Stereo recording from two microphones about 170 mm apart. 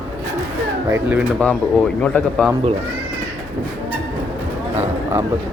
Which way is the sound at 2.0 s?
5° left (ahead or behind).